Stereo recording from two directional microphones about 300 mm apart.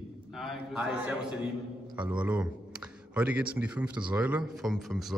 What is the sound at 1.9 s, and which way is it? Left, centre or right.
Speech, centre.